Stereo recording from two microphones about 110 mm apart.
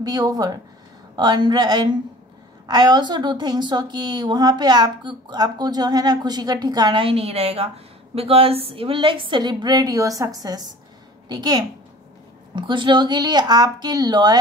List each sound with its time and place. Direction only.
0.0 s a woman's voice: 35° right (ahead or behind)
7.0 s a woman's voice: 60° right (ahead or behind); by 14.4 s 40° right (ahead or behind)